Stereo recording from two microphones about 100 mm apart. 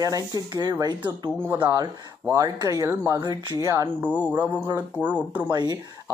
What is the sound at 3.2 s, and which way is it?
Speech, 45° right (ahead or behind).